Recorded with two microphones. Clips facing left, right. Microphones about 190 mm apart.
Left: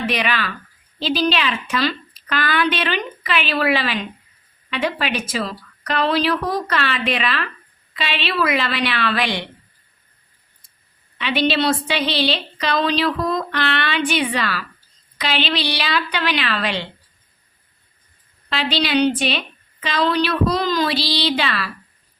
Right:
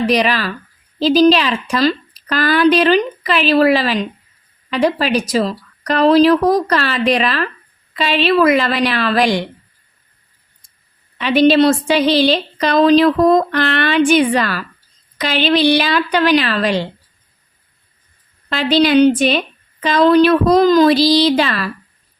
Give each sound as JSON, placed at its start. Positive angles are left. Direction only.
{"t": 0.0, "sound": "a woman's voice", "side_deg": -40}
{"t": 11.2, "sound": "a woman's voice", "side_deg": -45}
{"t": 18.5, "sound": "a woman's voice", "side_deg": -45}